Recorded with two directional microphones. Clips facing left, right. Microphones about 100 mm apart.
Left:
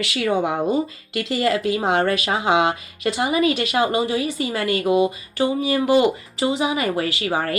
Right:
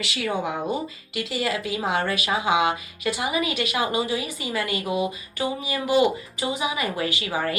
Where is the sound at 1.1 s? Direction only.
55° left (ahead or behind); by 4.0 s 35° left (ahead or behind).